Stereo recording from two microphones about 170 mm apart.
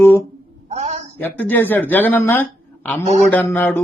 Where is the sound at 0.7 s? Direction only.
40° right (ahead or behind).